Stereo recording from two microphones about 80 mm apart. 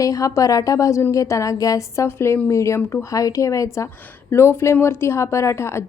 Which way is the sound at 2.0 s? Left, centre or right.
Left.